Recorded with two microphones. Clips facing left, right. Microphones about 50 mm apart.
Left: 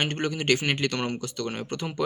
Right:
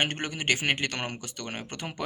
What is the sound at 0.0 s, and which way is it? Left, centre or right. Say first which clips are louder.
Speech: left 2 dB; right.